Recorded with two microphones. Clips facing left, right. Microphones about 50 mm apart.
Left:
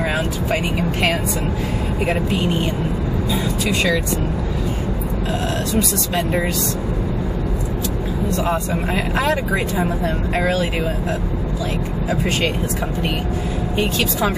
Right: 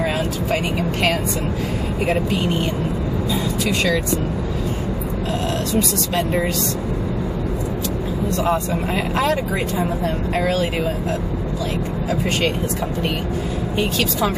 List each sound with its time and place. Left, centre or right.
2.0 s speech: centre
6.1 s speech: centre
8.5 s speech: centre